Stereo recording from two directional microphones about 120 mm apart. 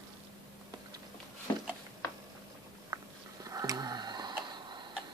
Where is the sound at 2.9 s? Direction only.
30° right (ahead or behind).